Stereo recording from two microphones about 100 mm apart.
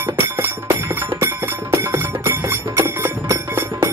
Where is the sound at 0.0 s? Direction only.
25° right (ahead or behind).